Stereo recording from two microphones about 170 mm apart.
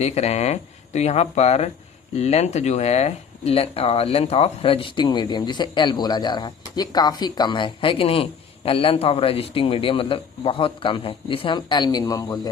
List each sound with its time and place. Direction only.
0.0 s speech: 40° left (ahead or behind); by 12.4 s 20° left (ahead or behind)